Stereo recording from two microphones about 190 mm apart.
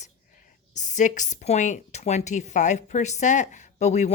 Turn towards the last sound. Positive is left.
turn(degrees=35)  # may be behind; listen again after turning